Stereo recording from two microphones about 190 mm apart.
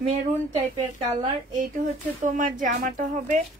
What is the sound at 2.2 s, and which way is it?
Speech, 40° right (ahead or behind).